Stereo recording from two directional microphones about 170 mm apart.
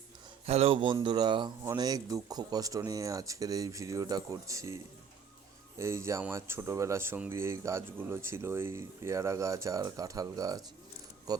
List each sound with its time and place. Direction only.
0.4 s speech: 35° right (ahead or behind)